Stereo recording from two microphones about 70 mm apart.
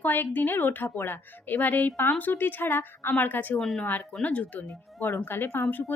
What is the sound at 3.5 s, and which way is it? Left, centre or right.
Speech, centre.